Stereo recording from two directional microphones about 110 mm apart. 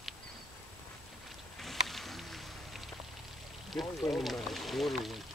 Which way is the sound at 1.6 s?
Centre (ahead or behind).